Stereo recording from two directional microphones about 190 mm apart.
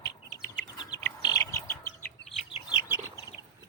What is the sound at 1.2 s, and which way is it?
Bird, 20° left (ahead or behind).